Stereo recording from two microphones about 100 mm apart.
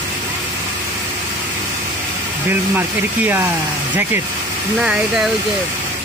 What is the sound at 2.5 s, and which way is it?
Speech, 20° right (ahead or behind).